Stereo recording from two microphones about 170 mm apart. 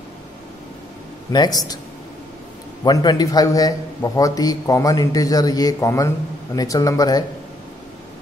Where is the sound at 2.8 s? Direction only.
25° left (ahead or behind).